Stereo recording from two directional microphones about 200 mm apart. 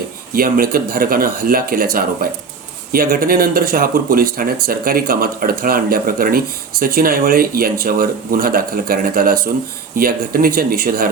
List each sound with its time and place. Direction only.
0.3 s speech: 45° right (ahead or behind)